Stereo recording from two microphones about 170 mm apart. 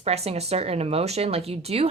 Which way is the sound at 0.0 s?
35° right (ahead or behind).